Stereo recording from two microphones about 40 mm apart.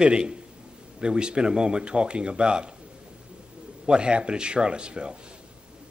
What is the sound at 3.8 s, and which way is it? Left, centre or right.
Speech, right.